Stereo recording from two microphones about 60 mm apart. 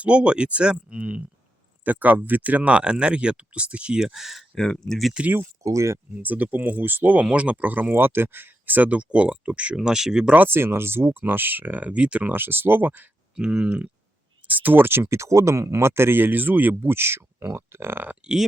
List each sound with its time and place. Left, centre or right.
0.0 s speech: centre
4.5 s speech: centre
5.6 s speech: right
6.2 s speech: right; by 10.3 s centre
10.3 s speech: right; by 12.3 s centre
12.3 s speech: right
13.3 s speech: centre
14.4 s speech: right
15.2 s speech: right